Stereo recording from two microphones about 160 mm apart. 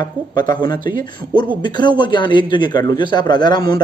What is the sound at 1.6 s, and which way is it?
A man's voice, 30° left (ahead or behind).